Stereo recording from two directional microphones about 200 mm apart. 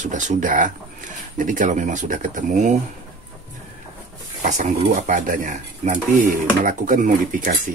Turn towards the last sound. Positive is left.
turn(degrees=-40)  # may be behind; listen again after turning